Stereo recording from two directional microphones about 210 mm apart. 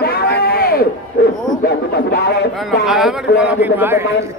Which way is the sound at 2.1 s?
50° left (ahead or behind).